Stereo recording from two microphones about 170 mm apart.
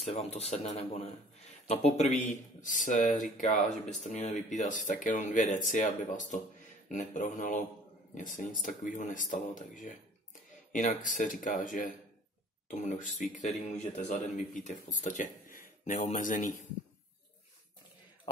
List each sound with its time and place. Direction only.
0.0 s a man's voice: 40° left (ahead or behind)